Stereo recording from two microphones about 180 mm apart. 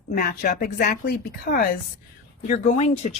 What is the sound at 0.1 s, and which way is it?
A woman's voice, 50° left (ahead or behind).